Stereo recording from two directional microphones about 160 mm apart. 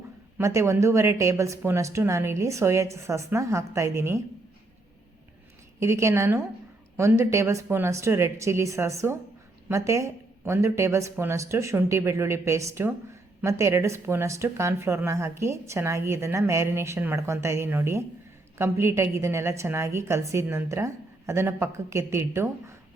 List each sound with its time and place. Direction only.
0.3 s a woman's voice: 15° right (ahead or behind)
5.8 s a woman's voice: 15° right (ahead or behind)